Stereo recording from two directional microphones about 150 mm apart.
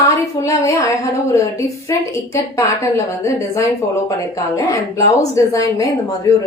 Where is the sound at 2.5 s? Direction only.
20° left (ahead or behind).